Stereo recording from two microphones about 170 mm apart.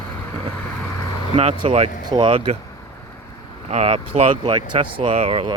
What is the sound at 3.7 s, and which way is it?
Speech, 40° right (ahead or behind).